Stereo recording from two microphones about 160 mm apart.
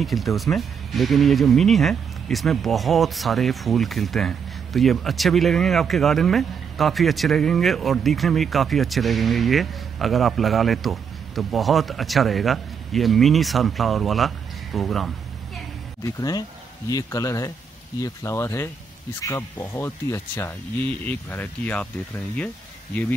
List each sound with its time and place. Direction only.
0.0 s speech: centre (ahead or behind)
16.0 s speech: 25° left (ahead or behind)